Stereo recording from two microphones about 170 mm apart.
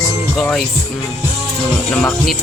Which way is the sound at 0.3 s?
Centre (ahead or behind).